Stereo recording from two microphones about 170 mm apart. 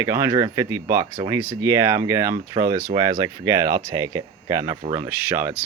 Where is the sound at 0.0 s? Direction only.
15° right (ahead or behind).